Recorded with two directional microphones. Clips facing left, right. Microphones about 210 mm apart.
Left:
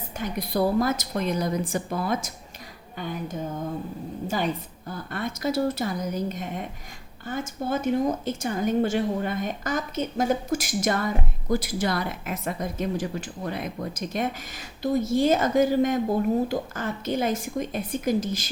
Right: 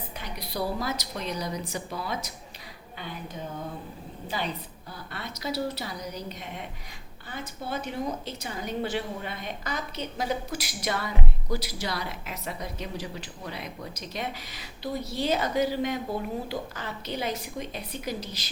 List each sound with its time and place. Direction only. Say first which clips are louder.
0.2 s a woman's voice: left 8 dB; 50° left (ahead or behind)
4.9 s a woman's voice: left 9 dB; 50° left (ahead or behind)